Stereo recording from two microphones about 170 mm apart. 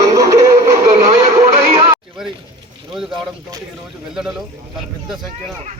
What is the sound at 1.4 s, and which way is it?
Music, 35° right (ahead or behind).